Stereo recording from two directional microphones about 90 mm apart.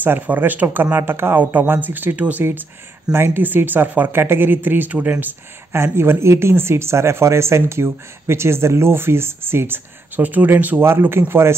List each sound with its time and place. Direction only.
0.0 s speech: 20° right (ahead or behind)